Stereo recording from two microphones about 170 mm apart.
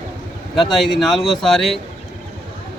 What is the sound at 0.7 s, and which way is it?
Speech, centre (ahead or behind).